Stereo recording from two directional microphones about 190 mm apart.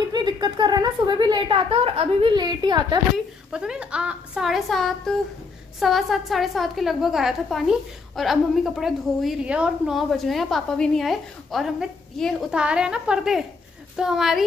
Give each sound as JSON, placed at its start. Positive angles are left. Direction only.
{"t": 0.1, "sound": "a woman's voice", "side_deg": -20}
{"t": 3.5, "sound": "a woman's voice", "side_deg": -5}